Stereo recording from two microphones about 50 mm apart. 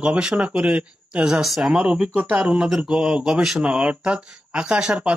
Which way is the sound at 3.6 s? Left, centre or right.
Right.